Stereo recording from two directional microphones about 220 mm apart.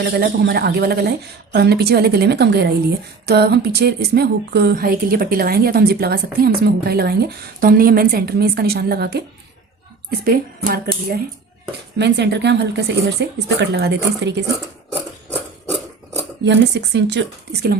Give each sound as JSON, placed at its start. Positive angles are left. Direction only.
{"t": 0.0, "sound": "speech", "side_deg": -45}
{"t": 16.4, "sound": "speech", "side_deg": -50}